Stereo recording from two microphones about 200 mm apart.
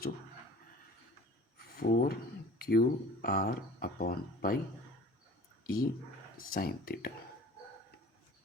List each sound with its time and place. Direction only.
1.5 s a sound: 50° left (ahead or behind)
2.6 s speech: 50° left (ahead or behind)
5.6 s speech: 45° left (ahead or behind)